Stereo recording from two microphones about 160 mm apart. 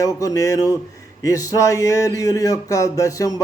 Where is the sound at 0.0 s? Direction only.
20° left (ahead or behind).